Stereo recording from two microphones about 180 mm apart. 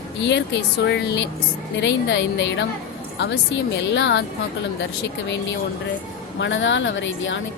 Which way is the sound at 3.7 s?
75° left (ahead or behind).